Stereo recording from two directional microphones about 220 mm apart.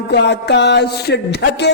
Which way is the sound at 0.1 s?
50° left (ahead or behind).